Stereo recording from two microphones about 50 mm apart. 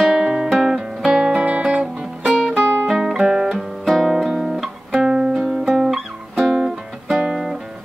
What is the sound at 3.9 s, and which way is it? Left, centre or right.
Guitar, centre.